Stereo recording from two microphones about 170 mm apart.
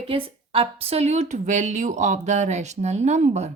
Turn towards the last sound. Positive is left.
turn(degrees=-40)  # may be behind; listen again after turning